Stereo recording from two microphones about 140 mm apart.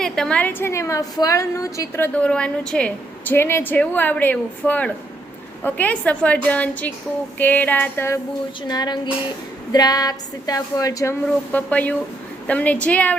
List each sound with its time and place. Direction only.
0.0 s a woman's voice: 5° left (ahead or behind); by 2.0 s 25° left (ahead or behind)
2.1 s a woman's voice: 10° left (ahead or behind)
8.6 s a woman's voice: 30° left (ahead or behind)
11.3 s a woman's voice: 10° left (ahead or behind)